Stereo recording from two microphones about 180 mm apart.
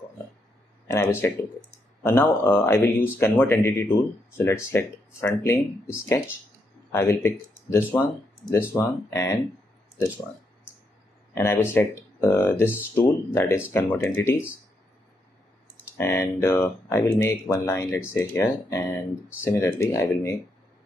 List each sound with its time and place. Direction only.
0.8 s speech: 15° left (ahead or behind)
11.3 s speech: 15° left (ahead or behind)
15.8 s speech: 15° left (ahead or behind)